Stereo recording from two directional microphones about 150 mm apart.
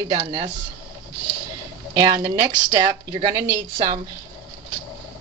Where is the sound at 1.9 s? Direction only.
20° right (ahead or behind).